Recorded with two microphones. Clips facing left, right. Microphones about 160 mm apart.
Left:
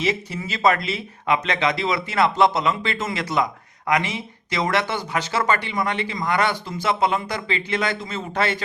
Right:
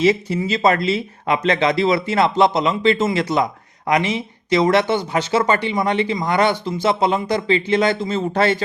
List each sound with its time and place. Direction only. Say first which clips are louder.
0.0 s speech: right 8 dB; 30° right (ahead or behind)